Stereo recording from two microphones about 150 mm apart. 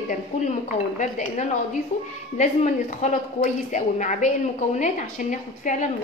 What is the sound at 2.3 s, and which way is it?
A woman's voice, 55° left (ahead or behind).